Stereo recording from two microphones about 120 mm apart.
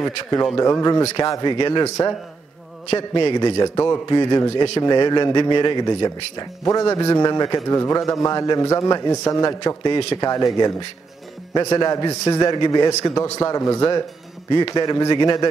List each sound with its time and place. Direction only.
0.6 s speech: 25° left (ahead or behind)
1.5 s a man's voice: 40° left (ahead or behind)
3.3 s a man's voice: 35° left (ahead or behind)